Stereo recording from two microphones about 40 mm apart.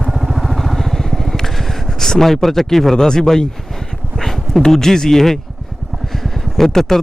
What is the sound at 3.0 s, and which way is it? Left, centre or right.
Speech, centre.